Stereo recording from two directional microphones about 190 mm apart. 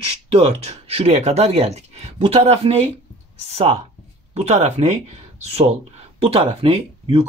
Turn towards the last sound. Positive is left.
turn(degrees=-30)  # may be behind; listen again after turning